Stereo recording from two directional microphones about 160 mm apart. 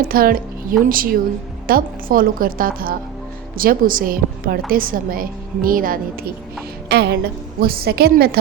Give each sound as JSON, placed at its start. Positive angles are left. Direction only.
{"t": 0.0, "sound": "a woman's voice", "side_deg": -65}
{"t": 6.8, "sound": "speech", "side_deg": -90}
{"t": 7.6, "sound": "a woman's voice", "side_deg": -70}